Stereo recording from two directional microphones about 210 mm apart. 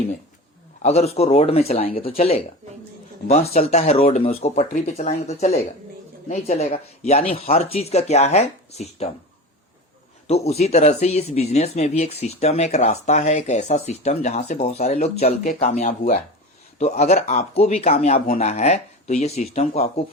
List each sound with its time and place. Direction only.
0.8 s speech: 30° left (ahead or behind)
10.2 s speech: 30° left (ahead or behind)